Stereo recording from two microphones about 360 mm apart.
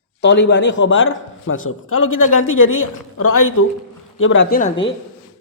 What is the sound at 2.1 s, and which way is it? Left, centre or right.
Speech, left.